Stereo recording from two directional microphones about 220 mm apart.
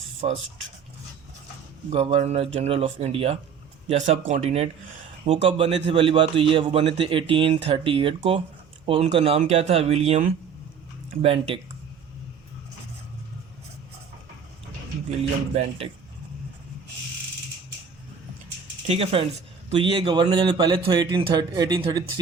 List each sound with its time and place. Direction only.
0.2 s speech: 30° right (ahead or behind)
1.9 s a man's voice: 25° right (ahead or behind)
15.5 s a man's voice: 25° right (ahead or behind)
18.9 s a man's voice: 25° right (ahead or behind)